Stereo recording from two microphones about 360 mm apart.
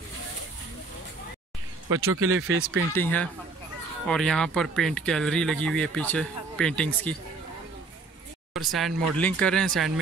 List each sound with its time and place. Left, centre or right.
2.0 s speech: right
3.0 s speech: centre
8.5 s speech: centre